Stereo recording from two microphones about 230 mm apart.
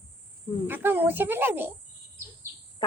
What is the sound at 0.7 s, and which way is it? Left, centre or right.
Speech, centre.